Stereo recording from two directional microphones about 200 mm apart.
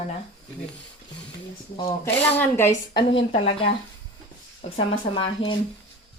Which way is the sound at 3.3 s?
30° left (ahead or behind).